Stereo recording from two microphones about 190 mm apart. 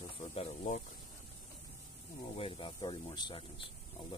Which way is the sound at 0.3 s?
35° left (ahead or behind).